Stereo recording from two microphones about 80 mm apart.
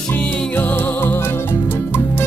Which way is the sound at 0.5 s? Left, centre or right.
Left.